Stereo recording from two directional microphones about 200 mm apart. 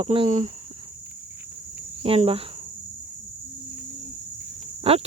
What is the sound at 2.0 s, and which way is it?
Cricket, 30° right (ahead or behind).